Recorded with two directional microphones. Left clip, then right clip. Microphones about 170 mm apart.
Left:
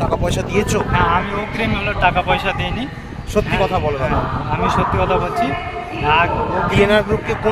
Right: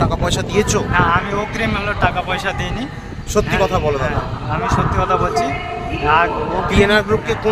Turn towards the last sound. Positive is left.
turn(degrees=-20)  # may be behind; listen again after turning